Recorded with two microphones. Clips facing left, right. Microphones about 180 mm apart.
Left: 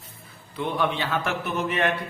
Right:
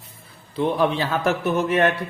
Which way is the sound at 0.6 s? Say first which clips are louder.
Right 5 dB; 35° right (ahead or behind).